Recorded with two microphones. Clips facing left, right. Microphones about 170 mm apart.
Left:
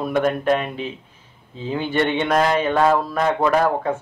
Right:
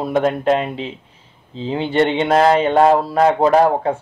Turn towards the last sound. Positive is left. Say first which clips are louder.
# right 5 dB
turn(degrees=-30)  # may be behind; listen again after turning